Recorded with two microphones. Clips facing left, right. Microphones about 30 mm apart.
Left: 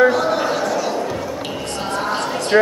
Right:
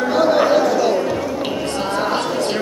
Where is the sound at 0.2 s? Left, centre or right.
Centre.